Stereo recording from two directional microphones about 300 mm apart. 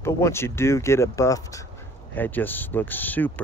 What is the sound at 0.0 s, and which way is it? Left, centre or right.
Speech, centre.